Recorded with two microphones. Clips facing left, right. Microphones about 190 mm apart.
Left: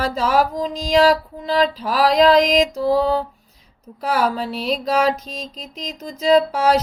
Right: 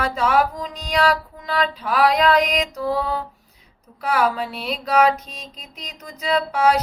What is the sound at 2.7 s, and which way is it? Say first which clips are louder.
Child singing: left 6 dB; 30° left (ahead or behind).